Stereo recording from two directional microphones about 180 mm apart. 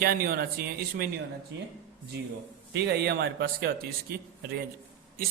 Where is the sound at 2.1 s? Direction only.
70° right (ahead or behind).